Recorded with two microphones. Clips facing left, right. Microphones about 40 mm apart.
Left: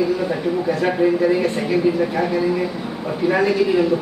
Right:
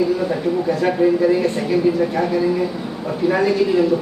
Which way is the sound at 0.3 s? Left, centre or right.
Centre.